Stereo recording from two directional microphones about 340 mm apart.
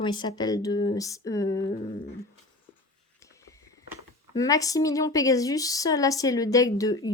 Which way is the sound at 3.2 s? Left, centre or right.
Centre.